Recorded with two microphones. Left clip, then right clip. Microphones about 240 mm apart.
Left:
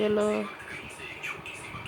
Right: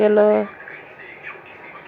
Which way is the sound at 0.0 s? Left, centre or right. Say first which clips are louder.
Right 12 dB; centre.